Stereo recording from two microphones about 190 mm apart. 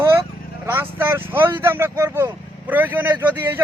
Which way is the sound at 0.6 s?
10° right (ahead or behind).